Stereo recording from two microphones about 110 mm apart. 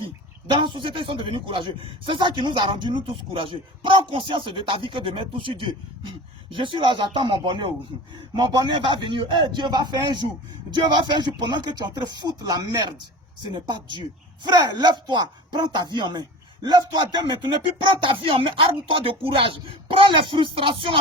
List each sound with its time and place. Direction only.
0.4 s a man's voice: 45° right (ahead or behind)